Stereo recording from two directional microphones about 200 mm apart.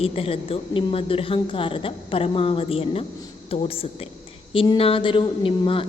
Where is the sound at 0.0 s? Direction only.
30° left (ahead or behind).